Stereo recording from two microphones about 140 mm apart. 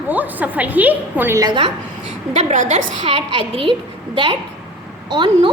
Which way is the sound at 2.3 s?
50° right (ahead or behind).